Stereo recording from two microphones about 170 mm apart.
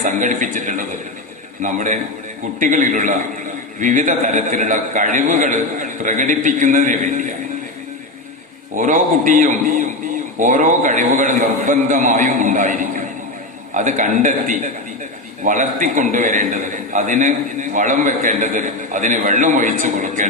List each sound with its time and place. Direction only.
0.0 s a man's voice: 45° right (ahead or behind)
8.7 s a man's voice: 50° right (ahead or behind)